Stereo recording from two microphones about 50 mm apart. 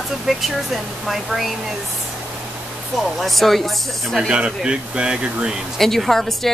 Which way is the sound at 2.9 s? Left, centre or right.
Centre.